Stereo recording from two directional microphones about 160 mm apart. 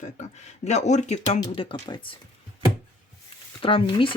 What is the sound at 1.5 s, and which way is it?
Speech, 35° left (ahead or behind).